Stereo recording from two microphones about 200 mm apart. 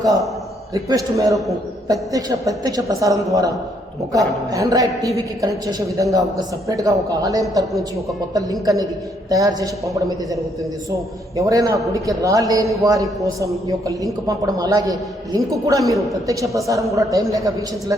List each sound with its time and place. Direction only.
0.7 s a woman's voice: 15° right (ahead or behind)
4.5 s a woman's voice: 15° right (ahead or behind)
11.3 s a woman's voice: 15° right (ahead or behind)